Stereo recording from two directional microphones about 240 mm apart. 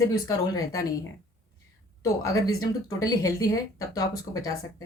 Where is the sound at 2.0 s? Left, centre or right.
Centre.